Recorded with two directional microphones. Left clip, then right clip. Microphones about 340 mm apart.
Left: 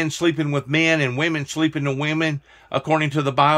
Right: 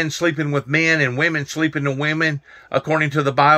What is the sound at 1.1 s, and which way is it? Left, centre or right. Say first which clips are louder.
Speech: right 3 dB; left.